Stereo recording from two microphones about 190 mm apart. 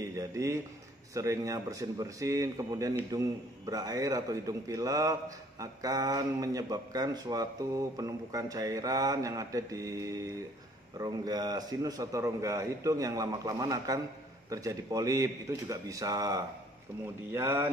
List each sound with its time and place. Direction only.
0.0 s a man's voice: 15° right (ahead or behind)